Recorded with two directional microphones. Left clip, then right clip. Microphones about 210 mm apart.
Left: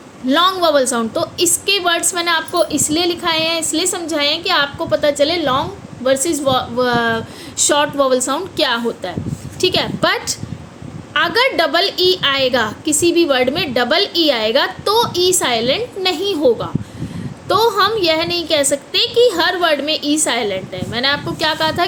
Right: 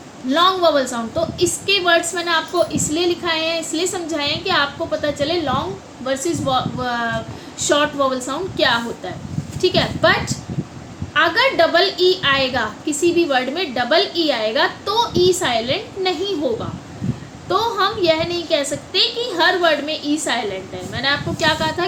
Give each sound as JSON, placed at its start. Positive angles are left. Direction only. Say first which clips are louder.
{"t": 0.3, "sound": "a woman's voice", "louder": "left 1 dB", "side_deg": 55}